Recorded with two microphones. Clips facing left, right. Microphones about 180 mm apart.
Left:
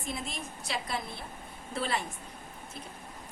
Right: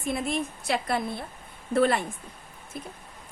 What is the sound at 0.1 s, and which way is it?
A woman's voice, 60° right (ahead or behind).